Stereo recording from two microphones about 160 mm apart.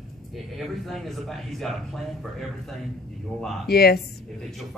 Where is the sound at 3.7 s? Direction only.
80° left.